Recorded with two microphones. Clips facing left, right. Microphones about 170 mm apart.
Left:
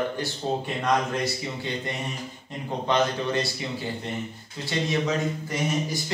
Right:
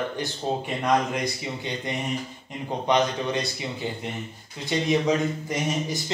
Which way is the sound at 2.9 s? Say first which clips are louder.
Right 1 dB; 20° right (ahead or behind).